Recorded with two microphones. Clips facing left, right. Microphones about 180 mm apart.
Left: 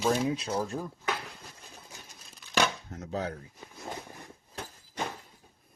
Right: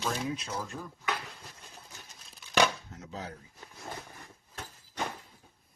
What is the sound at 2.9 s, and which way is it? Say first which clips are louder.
Speech: left 7 dB; 65° left (ahead or behind).